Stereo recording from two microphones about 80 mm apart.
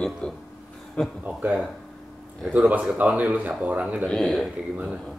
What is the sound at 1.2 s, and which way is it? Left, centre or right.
Speech, centre.